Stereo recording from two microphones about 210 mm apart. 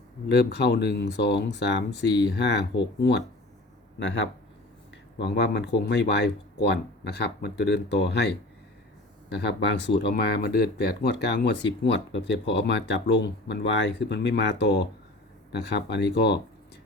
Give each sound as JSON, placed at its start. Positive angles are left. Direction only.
{"t": 0.3, "sound": "speech", "side_deg": 50}